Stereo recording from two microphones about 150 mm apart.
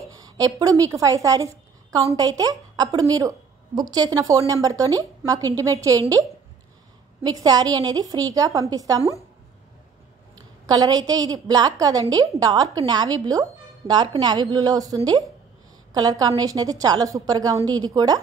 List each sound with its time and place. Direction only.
0.0 s a woman's voice: 25° right (ahead or behind)
7.4 s a woman's voice: 25° right (ahead or behind)
10.7 s a woman's voice: 25° right (ahead or behind)